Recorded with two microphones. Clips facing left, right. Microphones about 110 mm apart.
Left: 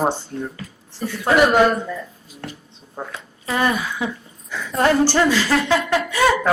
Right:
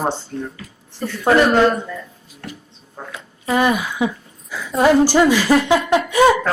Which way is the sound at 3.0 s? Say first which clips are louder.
Left 3 dB; 15° left (ahead or behind).